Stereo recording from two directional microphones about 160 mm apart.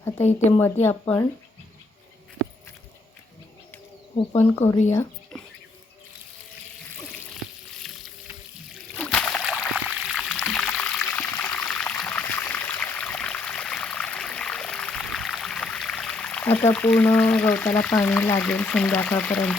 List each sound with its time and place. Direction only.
0.2 s speech: 45° left (ahead or behind)
0.6 s speech: 15° left (ahead or behind)
7.8 s sink: centre (ahead or behind)
8.9 s a sound: 5° left (ahead or behind)